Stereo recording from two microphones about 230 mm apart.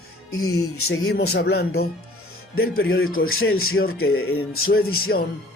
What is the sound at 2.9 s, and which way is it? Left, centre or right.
Speech, left.